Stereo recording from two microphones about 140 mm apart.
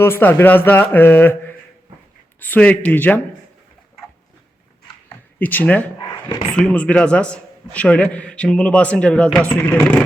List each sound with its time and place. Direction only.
0.0 s a man's voice: 15° left (ahead or behind)
5.0 s a sound: 15° left (ahead or behind)
6.5 s a man's voice: 5° left (ahead or behind)